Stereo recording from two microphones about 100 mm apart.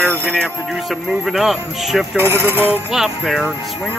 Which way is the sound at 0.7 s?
Centre (ahead or behind).